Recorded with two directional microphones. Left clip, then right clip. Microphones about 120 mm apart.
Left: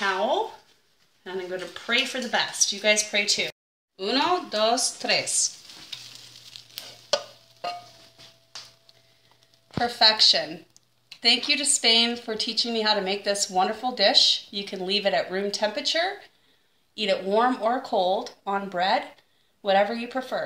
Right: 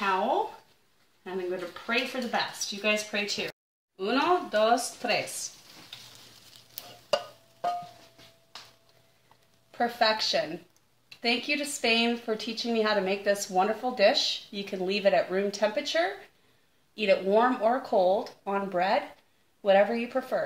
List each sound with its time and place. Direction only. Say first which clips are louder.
1.2 s speech: left 1 dB; 35° right (ahead or behind)
3.9 s speech: left 2 dB; 40° right (ahead or behind)
9.7 s speech: left 5 dB; 55° right (ahead or behind)
17.9 s speech: even; 10° right (ahead or behind)
18.4 s speech: left 2 dB; 45° right (ahead or behind)